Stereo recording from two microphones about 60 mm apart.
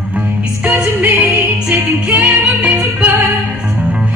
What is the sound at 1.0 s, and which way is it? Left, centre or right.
Music, right.